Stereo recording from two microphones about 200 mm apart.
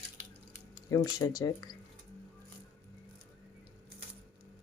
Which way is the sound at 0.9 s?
15° left (ahead or behind).